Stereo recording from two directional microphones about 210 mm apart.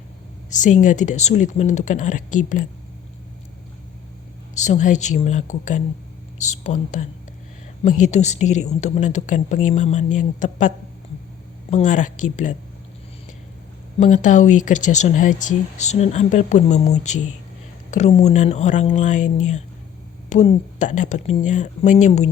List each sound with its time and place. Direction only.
0.5 s speech: 35° left (ahead or behind)
4.5 s speech: 35° left (ahead or behind)
11.7 s speech: 35° left (ahead or behind)
14.0 s speech: 35° left (ahead or behind)